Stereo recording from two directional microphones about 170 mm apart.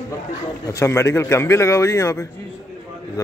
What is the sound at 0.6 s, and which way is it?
A man's voice, 15° left (ahead or behind).